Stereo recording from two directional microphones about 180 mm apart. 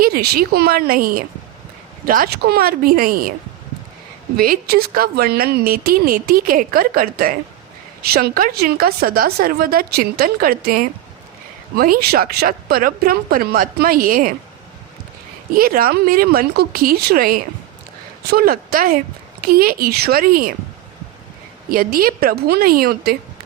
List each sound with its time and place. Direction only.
0.0 s speech: 60° right (ahead or behind)
4.4 s speech: 55° right (ahead or behind)
15.5 s speech: 55° right (ahead or behind)
21.7 s speech: 55° right (ahead or behind)